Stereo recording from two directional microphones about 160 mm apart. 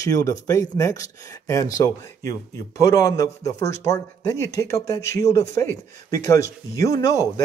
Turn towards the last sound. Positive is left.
turn(degrees=20)  # may be behind; listen again after turning